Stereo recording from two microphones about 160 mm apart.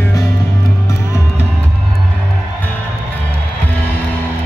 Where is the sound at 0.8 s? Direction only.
15° left (ahead or behind).